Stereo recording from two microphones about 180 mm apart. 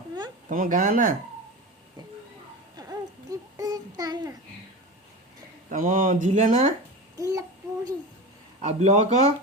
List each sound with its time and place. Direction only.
0.4 s speech: 50° right (ahead or behind)
2.7 s a sound: 20° right (ahead or behind)
5.6 s speech: 50° right (ahead or behind)
7.2 s child singing: 20° right (ahead or behind)
8.6 s a man's voice: 40° right (ahead or behind)